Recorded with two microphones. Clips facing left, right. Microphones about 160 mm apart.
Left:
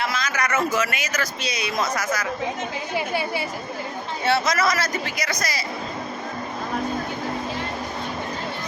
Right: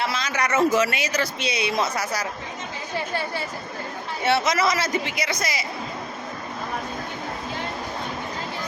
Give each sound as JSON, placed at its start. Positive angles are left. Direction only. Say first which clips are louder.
{"t": 0.0, "sound": "a man's voice", "louder": "even", "side_deg": -30}
{"t": 2.9, "sound": "a woman's voice", "louder": "left 2 dB", "side_deg": 10}
{"t": 4.3, "sound": "speech", "louder": "even", "side_deg": -25}